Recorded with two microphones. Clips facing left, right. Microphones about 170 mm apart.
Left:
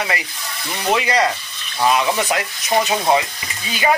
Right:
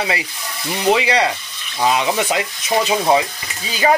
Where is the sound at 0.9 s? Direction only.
25° right (ahead or behind).